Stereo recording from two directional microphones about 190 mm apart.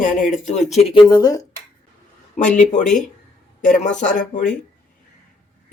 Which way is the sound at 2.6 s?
40° left (ahead or behind).